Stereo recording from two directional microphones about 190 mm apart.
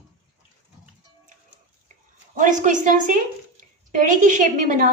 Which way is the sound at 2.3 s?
45° right (ahead or behind).